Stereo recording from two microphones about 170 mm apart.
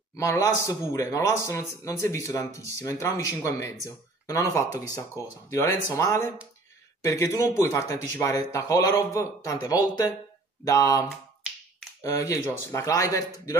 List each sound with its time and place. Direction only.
0.1 s speech: 20° left (ahead or behind)